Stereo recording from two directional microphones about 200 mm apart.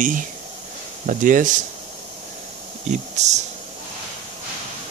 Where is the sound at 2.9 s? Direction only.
35° right (ahead or behind).